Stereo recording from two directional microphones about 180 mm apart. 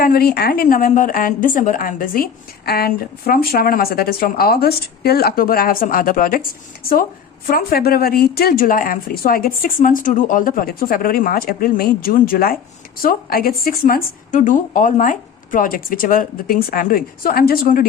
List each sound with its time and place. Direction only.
0.0 s speech: 55° left (ahead or behind)
7.4 s speech: 55° left (ahead or behind)